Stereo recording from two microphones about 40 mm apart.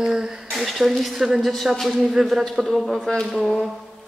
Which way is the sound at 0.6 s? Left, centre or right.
Centre.